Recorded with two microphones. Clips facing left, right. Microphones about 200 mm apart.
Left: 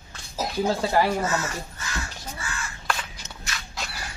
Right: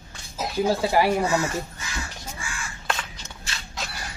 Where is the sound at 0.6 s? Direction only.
10° right (ahead or behind).